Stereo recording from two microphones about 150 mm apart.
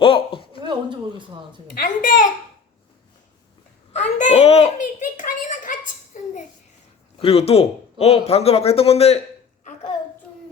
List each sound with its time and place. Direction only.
0.0 s speech: 35° left (ahead or behind)
0.6 s a sound: 30° right (ahead or behind)
1.7 s a woman's voice: 70° left (ahead or behind)
3.9 s a child's voice: 50° left (ahead or behind)
6.1 s a sound: 55° left (ahead or behind)
7.2 s speech: 40° left (ahead or behind)